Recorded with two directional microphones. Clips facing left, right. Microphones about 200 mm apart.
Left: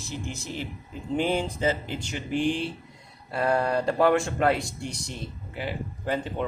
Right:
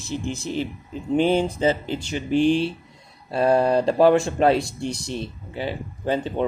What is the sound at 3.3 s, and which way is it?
Speech, 25° right (ahead or behind).